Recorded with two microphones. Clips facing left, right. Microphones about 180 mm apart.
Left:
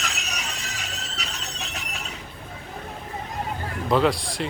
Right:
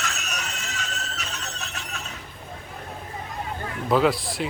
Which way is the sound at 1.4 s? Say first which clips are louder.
Left 1 dB; 15° left (ahead or behind).